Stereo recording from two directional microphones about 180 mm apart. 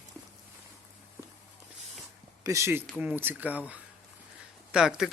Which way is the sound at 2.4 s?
15° right (ahead or behind).